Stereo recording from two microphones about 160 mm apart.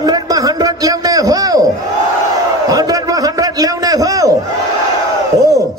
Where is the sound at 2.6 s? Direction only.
20° right (ahead or behind).